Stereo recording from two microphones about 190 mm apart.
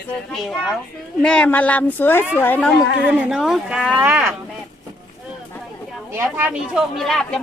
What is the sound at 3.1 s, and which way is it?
Speech, 5° right (ahead or behind).